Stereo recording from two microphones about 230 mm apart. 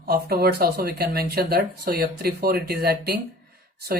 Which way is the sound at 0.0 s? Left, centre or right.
Right.